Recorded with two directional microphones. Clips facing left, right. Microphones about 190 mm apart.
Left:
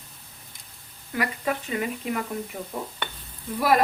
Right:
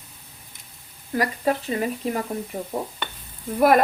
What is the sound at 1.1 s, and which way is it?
Speech, 35° right (ahead or behind).